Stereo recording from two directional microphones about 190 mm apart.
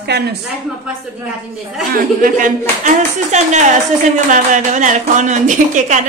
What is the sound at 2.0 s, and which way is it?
Speech, 45° right (ahead or behind).